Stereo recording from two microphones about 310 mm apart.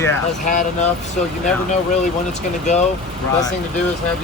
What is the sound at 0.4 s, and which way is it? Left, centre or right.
Speech, left.